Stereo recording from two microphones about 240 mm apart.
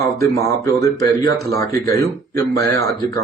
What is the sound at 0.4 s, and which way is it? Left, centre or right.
A man's voice, centre.